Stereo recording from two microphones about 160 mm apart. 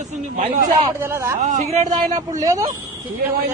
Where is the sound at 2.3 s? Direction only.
20° right (ahead or behind).